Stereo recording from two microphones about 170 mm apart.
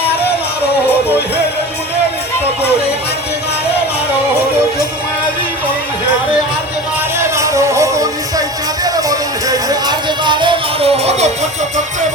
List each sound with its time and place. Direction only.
7.2 s music: 20° right (ahead or behind); by 11.3 s 40° right (ahead or behind)